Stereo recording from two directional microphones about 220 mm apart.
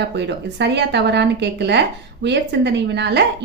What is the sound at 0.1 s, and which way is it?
A woman's voice, 50° right (ahead or behind).